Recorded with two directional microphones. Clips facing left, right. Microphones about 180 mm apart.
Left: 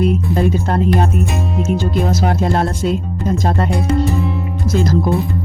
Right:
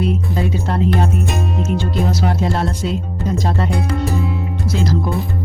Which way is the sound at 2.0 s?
50° left (ahead or behind).